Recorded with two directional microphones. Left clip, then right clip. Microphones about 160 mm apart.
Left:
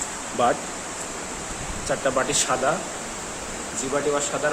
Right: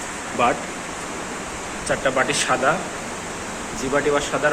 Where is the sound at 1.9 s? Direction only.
35° left (ahead or behind).